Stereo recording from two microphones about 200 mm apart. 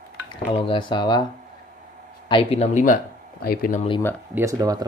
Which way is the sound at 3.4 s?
50° left (ahead or behind).